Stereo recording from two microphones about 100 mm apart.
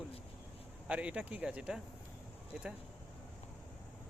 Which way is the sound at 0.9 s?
10° right (ahead or behind).